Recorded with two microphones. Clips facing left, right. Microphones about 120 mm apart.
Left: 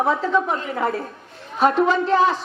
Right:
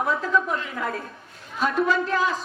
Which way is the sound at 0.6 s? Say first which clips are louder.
Left 5 dB; 35° left (ahead or behind).